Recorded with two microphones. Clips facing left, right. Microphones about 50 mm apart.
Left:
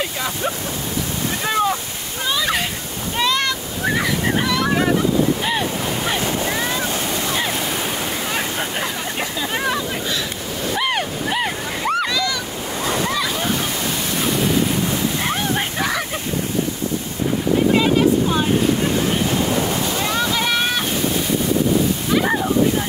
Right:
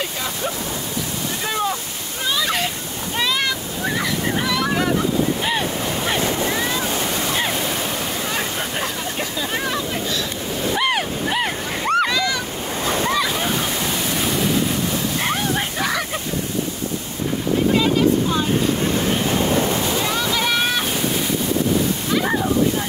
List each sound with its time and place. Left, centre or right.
1.4 s wind noise: left
2.2 s a sound: centre
3.2 s waves: centre
3.8 s waves: centre
5.4 s waves: centre
8.3 s waves: centre
9.5 s hubbub: centre
10.8 s waves: centre
12.1 s waves: right
12.8 s waves: right
13.1 s waves: centre
15.1 s a sound: centre
20.2 s boat: centre
22.1 s slosh: centre